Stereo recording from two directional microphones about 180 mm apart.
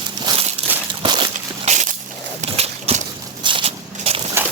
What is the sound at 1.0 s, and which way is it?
Slosh, 25° right (ahead or behind).